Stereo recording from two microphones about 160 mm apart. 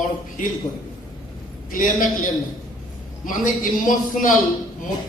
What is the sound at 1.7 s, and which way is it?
Speech, 60° left (ahead or behind).